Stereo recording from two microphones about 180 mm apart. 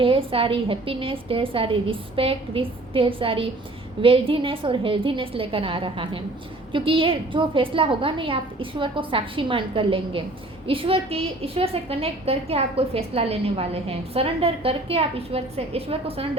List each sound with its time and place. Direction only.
0.0 s a woman's voice: 30° right (ahead or behind)